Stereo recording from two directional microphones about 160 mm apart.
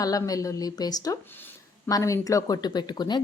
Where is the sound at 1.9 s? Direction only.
20° left (ahead or behind).